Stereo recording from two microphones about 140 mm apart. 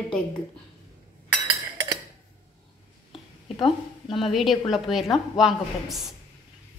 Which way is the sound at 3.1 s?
40° left (ahead or behind).